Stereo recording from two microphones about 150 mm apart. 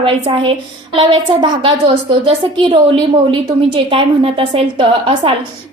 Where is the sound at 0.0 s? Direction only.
35° right (ahead or behind).